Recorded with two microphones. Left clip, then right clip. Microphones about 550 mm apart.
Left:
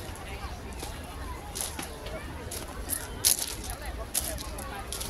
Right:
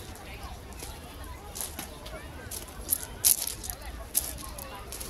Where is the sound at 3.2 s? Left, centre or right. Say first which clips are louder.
Left 1 dB; right.